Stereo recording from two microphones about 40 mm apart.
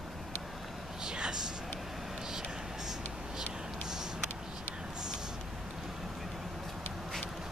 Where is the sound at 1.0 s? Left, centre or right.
Centre.